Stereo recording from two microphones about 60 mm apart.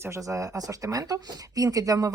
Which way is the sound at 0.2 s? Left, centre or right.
Right.